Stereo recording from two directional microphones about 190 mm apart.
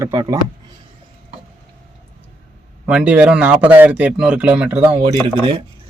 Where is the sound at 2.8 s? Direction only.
5° right (ahead or behind).